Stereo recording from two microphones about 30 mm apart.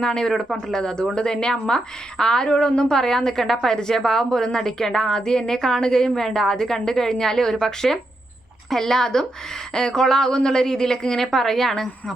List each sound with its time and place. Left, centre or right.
0.0 s a woman's voice: left
2.9 s a woman's voice: centre